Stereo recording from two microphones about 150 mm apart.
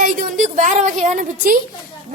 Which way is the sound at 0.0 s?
60° right (ahead or behind).